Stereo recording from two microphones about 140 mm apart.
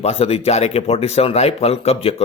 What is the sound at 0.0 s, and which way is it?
Speech, 45° left (ahead or behind).